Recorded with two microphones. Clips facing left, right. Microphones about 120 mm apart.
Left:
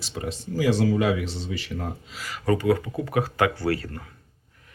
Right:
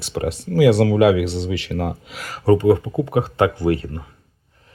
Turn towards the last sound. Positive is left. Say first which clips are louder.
# right 6 dB
turn(degrees=-20)  # may be behind; listen again after turning